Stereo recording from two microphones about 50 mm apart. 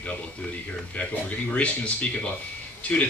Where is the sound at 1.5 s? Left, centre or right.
Left.